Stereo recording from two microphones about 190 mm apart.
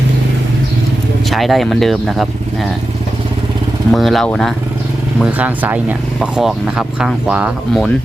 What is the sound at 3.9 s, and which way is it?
Speech, centre (ahead or behind).